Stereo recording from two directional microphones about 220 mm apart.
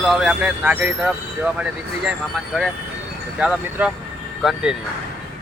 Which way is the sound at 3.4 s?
5° right (ahead or behind).